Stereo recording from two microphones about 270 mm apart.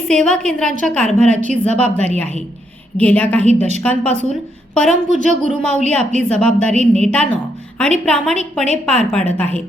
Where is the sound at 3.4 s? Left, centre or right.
Right.